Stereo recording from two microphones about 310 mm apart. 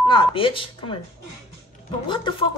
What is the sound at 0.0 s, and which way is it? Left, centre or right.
Speech, centre.